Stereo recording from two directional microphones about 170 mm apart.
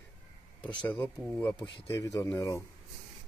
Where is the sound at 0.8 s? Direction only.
10° left (ahead or behind).